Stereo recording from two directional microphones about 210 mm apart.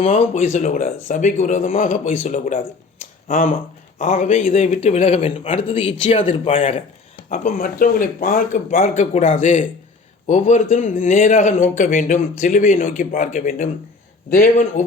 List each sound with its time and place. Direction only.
0.0 s speech: 30° left (ahead or behind)
3.0 s a sound: 35° left (ahead or behind)
3.9 s a man's voice: 35° left (ahead or behind)